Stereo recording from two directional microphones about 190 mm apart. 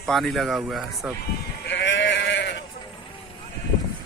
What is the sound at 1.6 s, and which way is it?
Sheep, 70° left (ahead or behind).